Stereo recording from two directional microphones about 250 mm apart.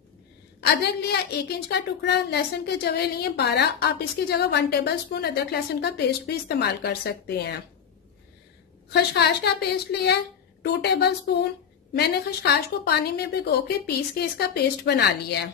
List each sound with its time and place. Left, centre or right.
0.6 s a woman's voice: left
8.9 s a woman's voice: left